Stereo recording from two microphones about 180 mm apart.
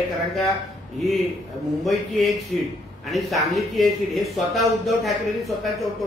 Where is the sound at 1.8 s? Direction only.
Centre (ahead or behind).